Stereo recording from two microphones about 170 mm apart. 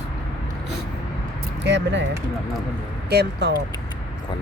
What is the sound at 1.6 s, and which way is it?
Keys jangling, 90° right.